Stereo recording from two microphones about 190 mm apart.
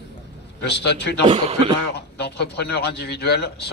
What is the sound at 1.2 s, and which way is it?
Speech, 30° right (ahead or behind).